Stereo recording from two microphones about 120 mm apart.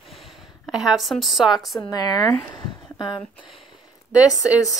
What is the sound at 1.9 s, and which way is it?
Speech, 30° left (ahead or behind).